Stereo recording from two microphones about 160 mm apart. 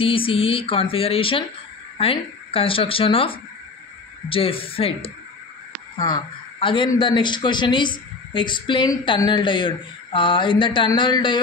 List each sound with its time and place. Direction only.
0.0 s a woman's voice: 35° left (ahead or behind)